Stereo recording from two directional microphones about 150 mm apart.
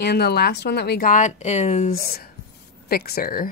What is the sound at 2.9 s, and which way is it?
Speech, 90° left.